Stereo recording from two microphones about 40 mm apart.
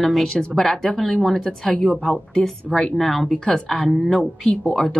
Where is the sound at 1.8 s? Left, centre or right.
Centre.